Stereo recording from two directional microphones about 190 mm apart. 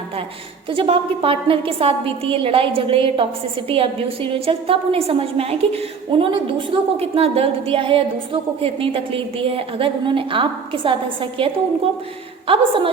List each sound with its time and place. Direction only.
0.7 s a woman's voice: 30° right (ahead or behind)